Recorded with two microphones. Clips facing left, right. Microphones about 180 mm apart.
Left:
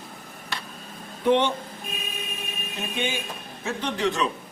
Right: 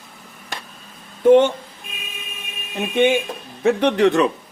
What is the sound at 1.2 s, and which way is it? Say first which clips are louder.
Speech: right 9 dB; 45° right (ahead or behind).